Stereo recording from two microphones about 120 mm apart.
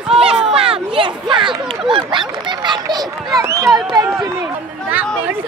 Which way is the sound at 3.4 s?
25° right (ahead or behind).